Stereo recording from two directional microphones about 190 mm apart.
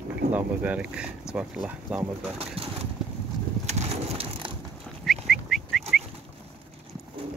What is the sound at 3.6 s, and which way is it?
Bird, 35° right (ahead or behind).